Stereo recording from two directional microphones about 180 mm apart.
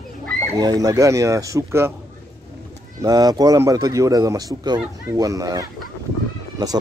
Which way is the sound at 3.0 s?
20° right (ahead or behind).